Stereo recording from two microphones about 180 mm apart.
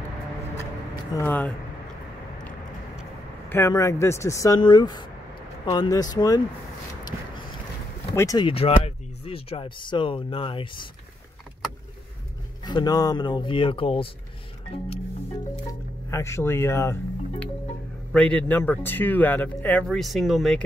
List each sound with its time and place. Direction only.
1.1 s speech: 10° left (ahead or behind)
3.4 s speech: 15° left (ahead or behind)
8.1 s speech: 20° left (ahead or behind)
12.6 s speech: 20° left (ahead or behind)
16.1 s speech: 15° left (ahead or behind)